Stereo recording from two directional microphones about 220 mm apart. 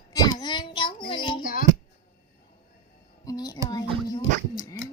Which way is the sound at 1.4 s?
40° left (ahead or behind).